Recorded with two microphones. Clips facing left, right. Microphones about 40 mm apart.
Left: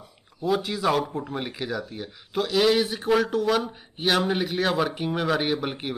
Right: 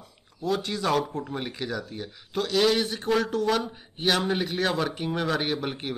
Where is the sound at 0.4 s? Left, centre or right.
Centre.